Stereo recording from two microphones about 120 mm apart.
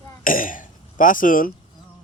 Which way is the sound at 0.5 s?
90° left.